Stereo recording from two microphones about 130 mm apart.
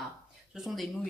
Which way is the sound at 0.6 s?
Centre (ahead or behind).